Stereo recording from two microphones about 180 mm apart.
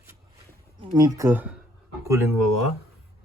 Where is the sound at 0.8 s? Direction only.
20° right (ahead or behind).